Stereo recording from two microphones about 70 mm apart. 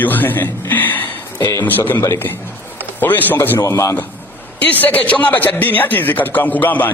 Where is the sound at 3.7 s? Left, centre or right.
Left.